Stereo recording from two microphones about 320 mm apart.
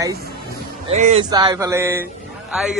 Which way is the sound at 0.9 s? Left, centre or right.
Right.